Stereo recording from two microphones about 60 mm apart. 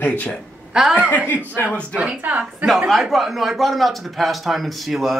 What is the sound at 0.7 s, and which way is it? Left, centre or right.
Speech, centre.